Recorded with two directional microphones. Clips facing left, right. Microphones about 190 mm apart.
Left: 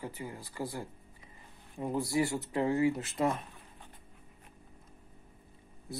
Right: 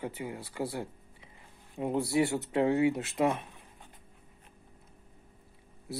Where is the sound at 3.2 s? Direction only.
5° right (ahead or behind).